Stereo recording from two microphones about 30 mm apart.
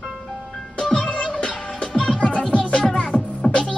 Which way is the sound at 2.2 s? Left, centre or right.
Left.